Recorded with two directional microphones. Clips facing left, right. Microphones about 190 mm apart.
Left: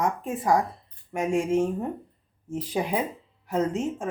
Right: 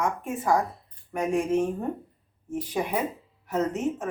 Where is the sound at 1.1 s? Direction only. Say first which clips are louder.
Left 1 dB; 25° left (ahead or behind).